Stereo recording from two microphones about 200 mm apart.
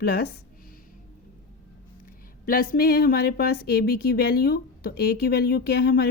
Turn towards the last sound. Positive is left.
turn(degrees=55)  # may be behind; listen again after turning